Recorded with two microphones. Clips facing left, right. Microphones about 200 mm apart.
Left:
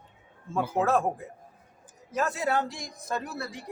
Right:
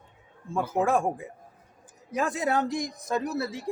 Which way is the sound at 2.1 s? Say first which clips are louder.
Right 1 dB; 15° right (ahead or behind).